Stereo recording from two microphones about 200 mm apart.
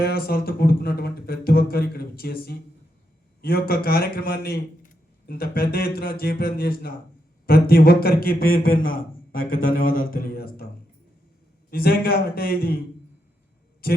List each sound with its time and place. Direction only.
0.0 s speech: 50° left (ahead or behind)
11.7 s speech: 50° left (ahead or behind)
13.8 s speech: 50° left (ahead or behind)